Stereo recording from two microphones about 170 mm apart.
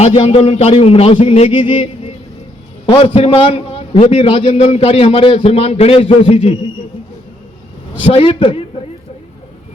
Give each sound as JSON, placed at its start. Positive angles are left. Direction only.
{"t": 0.0, "sound": "a man's voice", "side_deg": 35}
{"t": 8.0, "sound": "a man's voice", "side_deg": 35}